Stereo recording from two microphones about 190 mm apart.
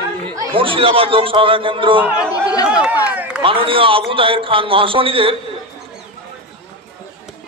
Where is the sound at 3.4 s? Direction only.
30° right (ahead or behind).